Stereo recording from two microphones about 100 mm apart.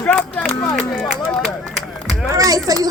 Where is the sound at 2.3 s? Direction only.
35° right (ahead or behind).